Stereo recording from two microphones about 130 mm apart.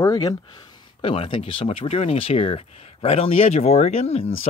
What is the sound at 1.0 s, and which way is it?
Speech, 45° left (ahead or behind).